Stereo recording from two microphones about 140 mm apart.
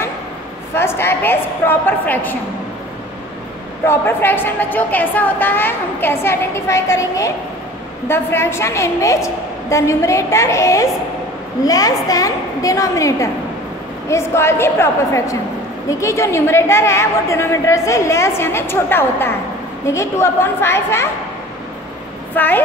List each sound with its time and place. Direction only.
0.7 s a woman's voice: 15° left (ahead or behind)
3.8 s a woman's voice: 15° left (ahead or behind)
22.3 s a woman's voice: 15° left (ahead or behind)